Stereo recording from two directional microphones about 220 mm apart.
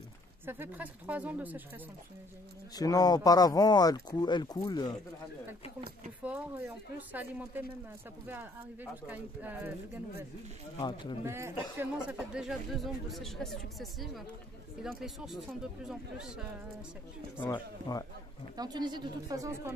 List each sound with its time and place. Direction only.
0.5 s speech: 10° right (ahead or behind)
2.7 s speech: 15° left (ahead or behind)
7.0 s speech: 5° right (ahead or behind)
9.0 s speech: 10° right (ahead or behind)
10.8 s speech: 20° left (ahead or behind)
11.2 s speech: 10° right (ahead or behind)
17.5 s speech: 15° left (ahead or behind)
18.6 s speech: 20° right (ahead or behind)